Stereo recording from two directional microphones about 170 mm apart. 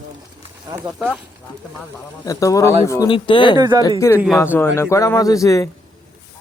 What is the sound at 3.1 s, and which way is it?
Speech, 30° left (ahead or behind).